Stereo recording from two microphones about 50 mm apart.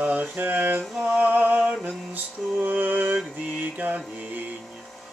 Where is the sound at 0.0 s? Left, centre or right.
Right.